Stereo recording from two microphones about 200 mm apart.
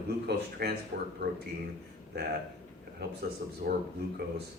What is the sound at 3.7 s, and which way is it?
Speech, 50° right (ahead or behind).